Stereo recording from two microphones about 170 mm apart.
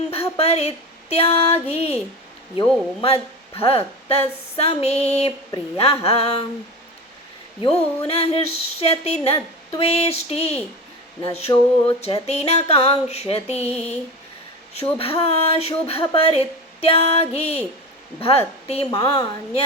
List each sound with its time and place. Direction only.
0.1 s speech: 35° left (ahead or behind)
3.0 s speech: 35° left (ahead or behind)
7.6 s speech: 35° left (ahead or behind)
14.9 s speech: 35° left (ahead or behind)
18.9 s a woman's voice: 20° left (ahead or behind)